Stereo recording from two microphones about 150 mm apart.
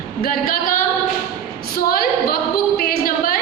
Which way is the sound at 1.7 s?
85° left.